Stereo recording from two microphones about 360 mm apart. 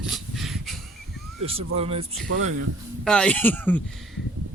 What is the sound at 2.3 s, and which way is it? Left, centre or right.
Speech, right.